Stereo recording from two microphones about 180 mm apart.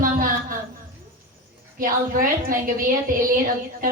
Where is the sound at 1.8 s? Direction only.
50° right (ahead or behind).